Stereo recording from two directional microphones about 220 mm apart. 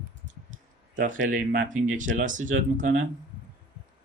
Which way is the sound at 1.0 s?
35° right (ahead or behind).